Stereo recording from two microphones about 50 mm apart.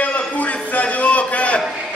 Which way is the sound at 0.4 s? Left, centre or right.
Left.